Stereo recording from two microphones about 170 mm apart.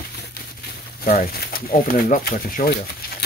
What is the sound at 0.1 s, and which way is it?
Crumpling, 70° left (ahead or behind).